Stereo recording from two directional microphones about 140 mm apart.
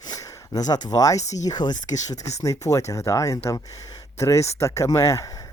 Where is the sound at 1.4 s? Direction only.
30° left (ahead or behind).